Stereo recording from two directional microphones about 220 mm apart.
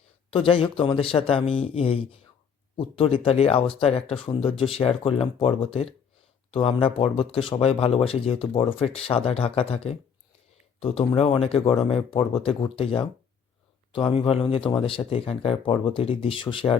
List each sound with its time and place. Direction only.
0.3 s speech: 25° left (ahead or behind)